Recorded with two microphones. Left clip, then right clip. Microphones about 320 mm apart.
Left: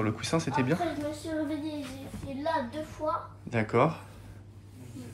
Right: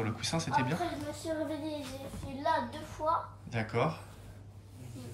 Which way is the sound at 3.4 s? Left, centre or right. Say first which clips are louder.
Left 11 dB; centre.